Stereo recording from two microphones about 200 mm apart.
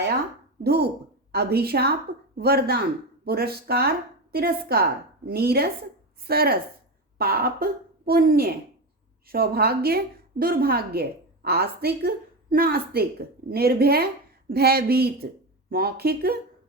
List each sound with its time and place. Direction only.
0.6 s a woman's voice: 55° right (ahead or behind)